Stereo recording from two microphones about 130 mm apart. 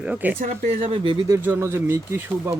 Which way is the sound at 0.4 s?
80° right.